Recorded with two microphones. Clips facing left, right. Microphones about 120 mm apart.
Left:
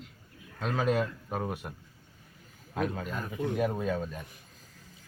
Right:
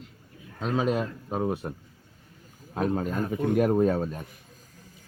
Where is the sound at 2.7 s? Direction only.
35° right (ahead or behind).